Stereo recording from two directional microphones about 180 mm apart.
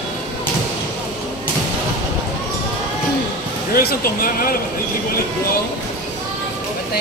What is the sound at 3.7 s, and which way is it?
Speech, 55° left (ahead or behind).